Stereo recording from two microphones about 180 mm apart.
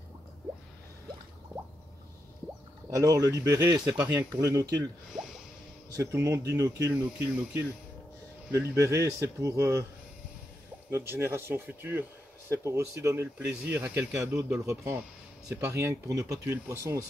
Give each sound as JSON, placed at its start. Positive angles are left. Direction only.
{"t": 2.9, "sound": "speech", "side_deg": -20}
{"t": 5.9, "sound": "speech", "side_deg": -15}
{"t": 10.9, "sound": "speech", "side_deg": -15}